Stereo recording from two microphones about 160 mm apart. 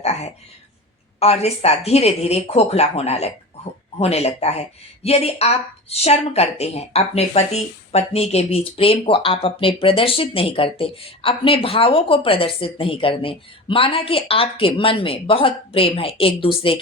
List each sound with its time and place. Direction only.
0.0 s a woman's voice: 40° left (ahead or behind)